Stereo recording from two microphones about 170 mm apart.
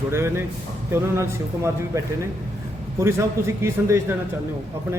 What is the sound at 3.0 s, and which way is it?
Speech, 15° right (ahead or behind).